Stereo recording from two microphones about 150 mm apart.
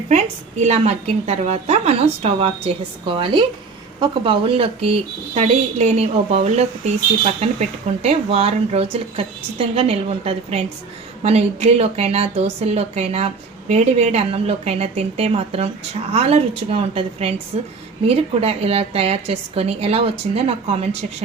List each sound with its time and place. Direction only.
0.1 s a woman's voice: 50° right (ahead or behind)